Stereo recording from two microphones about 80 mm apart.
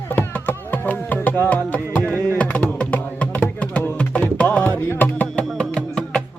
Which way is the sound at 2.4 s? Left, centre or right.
Centre.